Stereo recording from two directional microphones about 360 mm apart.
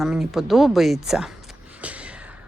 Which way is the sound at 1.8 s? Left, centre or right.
Centre.